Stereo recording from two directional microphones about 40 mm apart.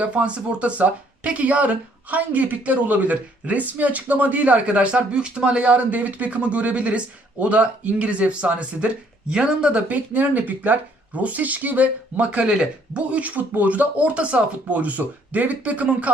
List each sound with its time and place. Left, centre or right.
0.0 s speech: right
9.9 s speech: right